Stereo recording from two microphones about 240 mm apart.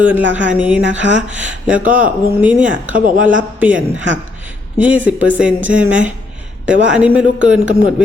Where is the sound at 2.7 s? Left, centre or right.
Right.